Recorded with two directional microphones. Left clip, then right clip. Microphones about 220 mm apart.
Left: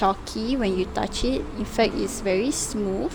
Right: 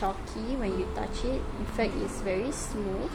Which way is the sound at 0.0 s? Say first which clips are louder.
Left 9 dB; 45° left (ahead or behind).